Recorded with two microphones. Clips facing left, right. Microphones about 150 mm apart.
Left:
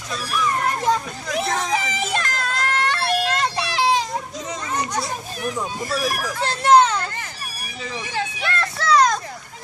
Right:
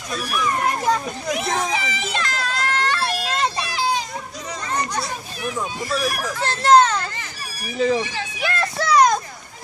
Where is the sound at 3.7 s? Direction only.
85° left.